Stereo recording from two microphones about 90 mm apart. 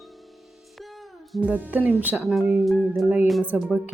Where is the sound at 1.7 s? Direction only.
20° right (ahead or behind).